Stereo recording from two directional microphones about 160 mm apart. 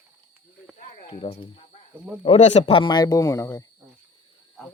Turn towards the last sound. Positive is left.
turn(degrees=20)  # may be behind; listen again after turning